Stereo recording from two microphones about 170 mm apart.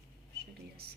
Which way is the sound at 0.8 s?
65° right (ahead or behind).